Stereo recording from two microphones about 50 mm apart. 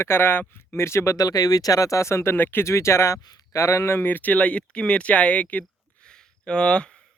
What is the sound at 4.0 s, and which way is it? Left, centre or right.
Speech, left.